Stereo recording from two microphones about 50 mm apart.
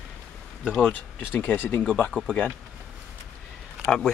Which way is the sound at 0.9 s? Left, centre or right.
Left.